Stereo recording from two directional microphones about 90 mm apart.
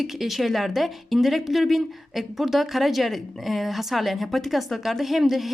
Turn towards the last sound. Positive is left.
turn(degrees=0)  # may be behind; listen again after turning